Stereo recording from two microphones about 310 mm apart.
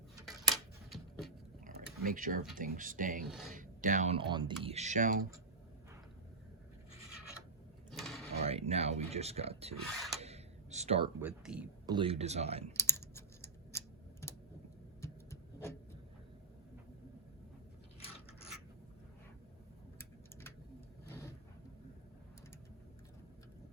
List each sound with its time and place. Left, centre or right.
0.3 s a sound: centre
1.6 s a sound: right
2.6 s speech: right
3.2 s a man's voice: centre
3.5 s speech: right
7.9 s mechanisms: centre
8.4 s speech: centre
10.2 s a sound: right
11.2 s a man's voice: centre
11.9 s speech: centre
12.7 s typing: centre
15.0 s vehicle: centre